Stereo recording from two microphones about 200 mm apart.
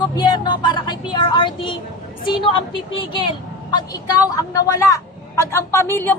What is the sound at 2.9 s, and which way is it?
A woman's voice, 25° left (ahead or behind).